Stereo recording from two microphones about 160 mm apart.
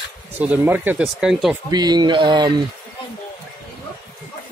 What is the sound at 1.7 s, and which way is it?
Speech, 25° right (ahead or behind).